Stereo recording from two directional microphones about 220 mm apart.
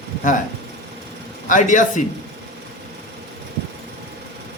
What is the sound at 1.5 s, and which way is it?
Speech, 35° left (ahead or behind).